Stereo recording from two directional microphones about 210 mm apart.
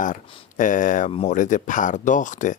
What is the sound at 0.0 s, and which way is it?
Speech, 40° left (ahead or behind).